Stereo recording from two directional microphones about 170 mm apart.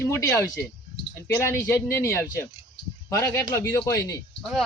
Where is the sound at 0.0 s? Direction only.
15° left (ahead or behind).